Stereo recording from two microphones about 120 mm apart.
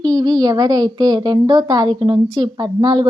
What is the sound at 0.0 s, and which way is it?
A woman's voice, 35° right (ahead or behind).